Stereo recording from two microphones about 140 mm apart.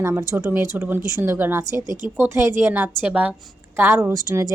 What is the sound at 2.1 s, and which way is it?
A woman's voice, 20° right (ahead or behind).